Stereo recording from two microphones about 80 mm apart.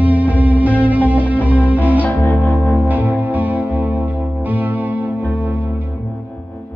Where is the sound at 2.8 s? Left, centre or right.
Right.